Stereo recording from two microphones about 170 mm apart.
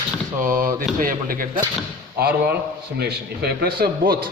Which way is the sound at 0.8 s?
55° right (ahead or behind).